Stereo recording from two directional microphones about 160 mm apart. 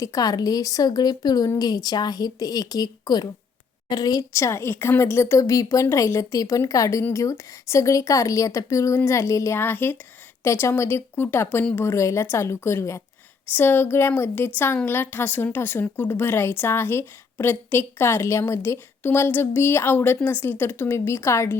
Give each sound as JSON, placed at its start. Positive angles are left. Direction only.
{"t": 0.0, "sound": "a woman's voice", "side_deg": 20}